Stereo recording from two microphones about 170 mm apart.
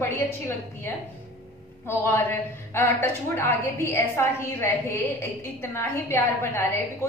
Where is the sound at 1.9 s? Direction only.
15° left (ahead or behind).